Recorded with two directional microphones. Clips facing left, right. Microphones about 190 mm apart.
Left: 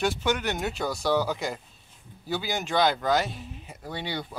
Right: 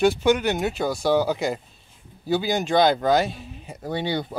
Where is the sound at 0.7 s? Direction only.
25° right (ahead or behind).